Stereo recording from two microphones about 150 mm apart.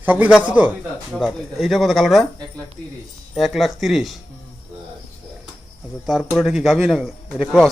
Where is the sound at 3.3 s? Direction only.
Centre (ahead or behind).